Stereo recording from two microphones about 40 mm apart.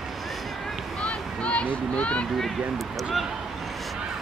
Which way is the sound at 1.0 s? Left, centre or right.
Left.